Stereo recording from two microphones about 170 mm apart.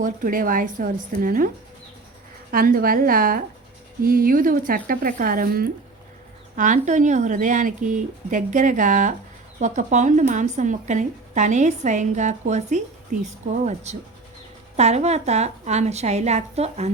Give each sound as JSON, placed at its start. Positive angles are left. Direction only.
{"t": 0.0, "sound": "a woman's voice", "side_deg": -50}
{"t": 2.5, "sound": "a woman's voice", "side_deg": -60}
{"t": 6.6, "sound": "a woman's voice", "side_deg": -45}